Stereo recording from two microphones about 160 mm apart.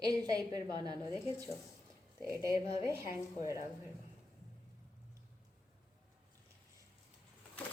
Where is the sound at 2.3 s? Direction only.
20° right (ahead or behind).